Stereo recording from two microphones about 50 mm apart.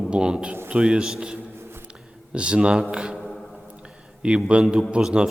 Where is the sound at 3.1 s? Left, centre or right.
Centre.